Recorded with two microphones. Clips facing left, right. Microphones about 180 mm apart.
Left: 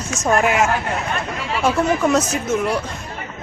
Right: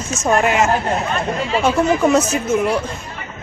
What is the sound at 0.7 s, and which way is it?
Speech, 30° right (ahead or behind).